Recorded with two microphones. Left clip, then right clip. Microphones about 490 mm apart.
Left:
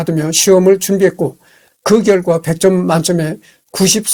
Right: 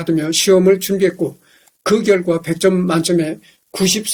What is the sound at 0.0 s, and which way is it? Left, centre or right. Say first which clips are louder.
Speech: left 2 dB; left.